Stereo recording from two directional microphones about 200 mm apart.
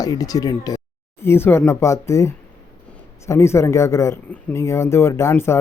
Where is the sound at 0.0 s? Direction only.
20° left (ahead or behind).